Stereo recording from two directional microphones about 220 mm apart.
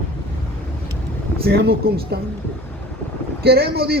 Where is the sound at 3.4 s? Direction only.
45° right (ahead or behind).